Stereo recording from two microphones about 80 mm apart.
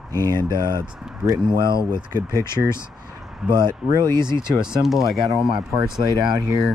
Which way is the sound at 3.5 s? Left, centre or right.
Right.